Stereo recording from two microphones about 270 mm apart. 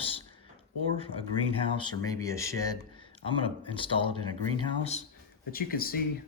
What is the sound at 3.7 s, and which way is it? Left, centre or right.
Speech, centre.